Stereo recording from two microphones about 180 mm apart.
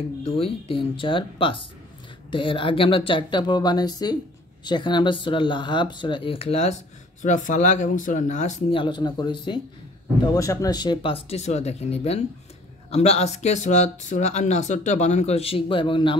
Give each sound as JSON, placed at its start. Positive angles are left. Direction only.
{"t": 0.2, "sound": "speech", "side_deg": 30}
{"t": 8.7, "sound": "speech", "side_deg": 25}